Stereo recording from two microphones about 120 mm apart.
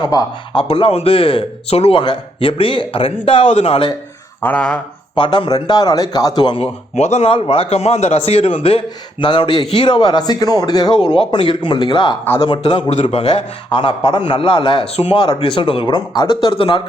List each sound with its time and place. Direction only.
0.0 s speech: 35° left (ahead or behind)
0.7 s speech: 55° left (ahead or behind)
3.4 s a man's voice: 65° left (ahead or behind)
4.4 s speech: 15° left (ahead or behind)
5.1 s speech: 45° left (ahead or behind)
6.6 s a man's voice: 65° left (ahead or behind); by 12.8 s 40° left (ahead or behind)
12.9 s speech: 65° left (ahead or behind)
15.1 s speech: 35° left (ahead or behind)
15.4 s speech: 50° left (ahead or behind)